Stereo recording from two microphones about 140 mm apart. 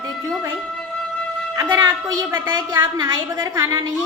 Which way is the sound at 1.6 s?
20° right (ahead or behind).